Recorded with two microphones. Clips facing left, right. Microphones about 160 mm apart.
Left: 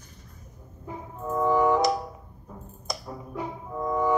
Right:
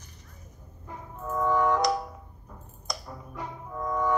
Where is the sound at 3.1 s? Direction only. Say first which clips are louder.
Left 5 dB; 10° left (ahead or behind).